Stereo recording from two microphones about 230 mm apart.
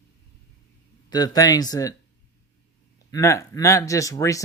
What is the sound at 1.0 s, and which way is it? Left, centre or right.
Speech, centre.